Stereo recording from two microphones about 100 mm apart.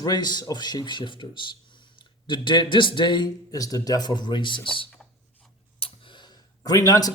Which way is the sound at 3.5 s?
35° left (ahead or behind).